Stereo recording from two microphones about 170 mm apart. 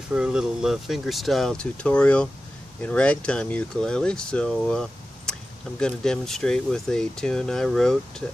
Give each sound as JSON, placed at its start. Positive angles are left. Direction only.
{"t": 0.1, "sound": "speech", "side_deg": -5}